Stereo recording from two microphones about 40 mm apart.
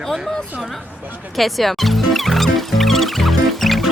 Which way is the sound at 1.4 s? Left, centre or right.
Centre.